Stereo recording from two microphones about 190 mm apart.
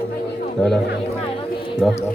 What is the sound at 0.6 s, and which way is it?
Speech, 5° left (ahead or behind).